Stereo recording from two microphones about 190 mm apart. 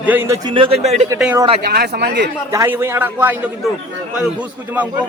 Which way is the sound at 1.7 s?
55° right (ahead or behind).